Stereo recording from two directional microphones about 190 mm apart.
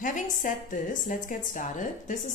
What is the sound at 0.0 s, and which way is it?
A woman's voice, 45° left (ahead or behind).